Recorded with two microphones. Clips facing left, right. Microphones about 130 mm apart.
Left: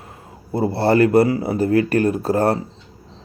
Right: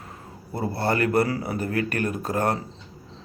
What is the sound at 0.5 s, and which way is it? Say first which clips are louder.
A man's voice: left 8 dB; 25° left (ahead or behind).